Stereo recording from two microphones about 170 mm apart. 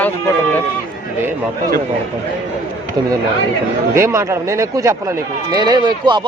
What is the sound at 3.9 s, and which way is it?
Speech, 15° right (ahead or behind).